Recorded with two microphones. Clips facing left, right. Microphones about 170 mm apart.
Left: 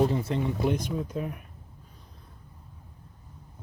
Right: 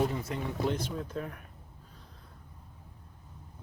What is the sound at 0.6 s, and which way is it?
Speech, 15° left (ahead or behind).